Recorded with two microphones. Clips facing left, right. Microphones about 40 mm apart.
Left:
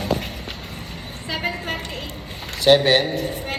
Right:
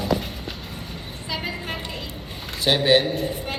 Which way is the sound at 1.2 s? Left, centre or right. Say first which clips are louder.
Left 4 dB; left.